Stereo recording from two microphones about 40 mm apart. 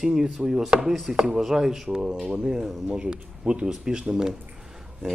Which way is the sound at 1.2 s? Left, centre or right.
Centre.